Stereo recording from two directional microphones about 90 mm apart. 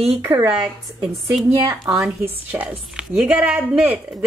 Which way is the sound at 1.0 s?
Centre (ahead or behind).